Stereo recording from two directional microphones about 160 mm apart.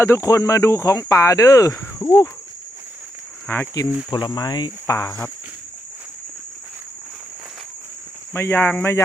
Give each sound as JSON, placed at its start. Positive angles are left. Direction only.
{"t": 0.0, "sound": "speech", "side_deg": 20}
{"t": 3.4, "sound": "speech", "side_deg": 15}
{"t": 4.1, "sound": "speech", "side_deg": 25}
{"t": 8.3, "sound": "speech", "side_deg": 15}